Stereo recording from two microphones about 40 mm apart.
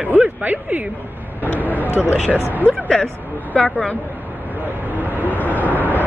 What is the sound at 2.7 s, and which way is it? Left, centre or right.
Speech, left.